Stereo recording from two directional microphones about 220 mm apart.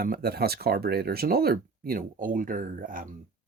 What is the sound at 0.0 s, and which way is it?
Speech, 45° right (ahead or behind).